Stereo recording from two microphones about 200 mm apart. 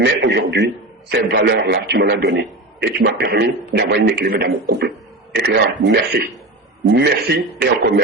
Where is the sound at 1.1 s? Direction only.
55° right (ahead or behind).